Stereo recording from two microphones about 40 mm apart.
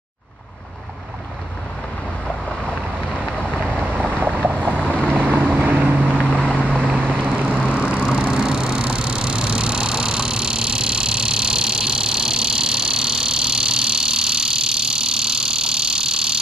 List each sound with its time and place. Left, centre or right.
2.7 s vehicle: left
4.7 s boat: left
5.1 s vehicle: right
6.0 s boat: left
7.3 s vehicle: centre